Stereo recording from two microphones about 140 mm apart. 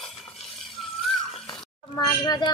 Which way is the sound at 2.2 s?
30° left (ahead or behind).